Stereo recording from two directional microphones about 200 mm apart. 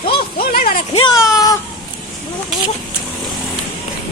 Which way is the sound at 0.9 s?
20° left (ahead or behind).